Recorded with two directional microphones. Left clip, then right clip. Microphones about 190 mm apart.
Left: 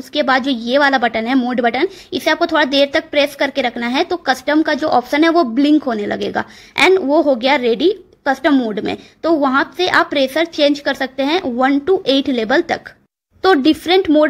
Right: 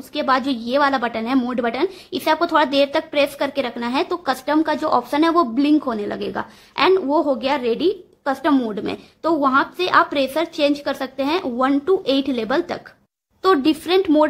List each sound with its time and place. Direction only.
0.1 s a woman's voice: 15° left (ahead or behind)